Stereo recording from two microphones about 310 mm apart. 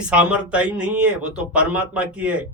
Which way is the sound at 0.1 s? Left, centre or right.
Centre.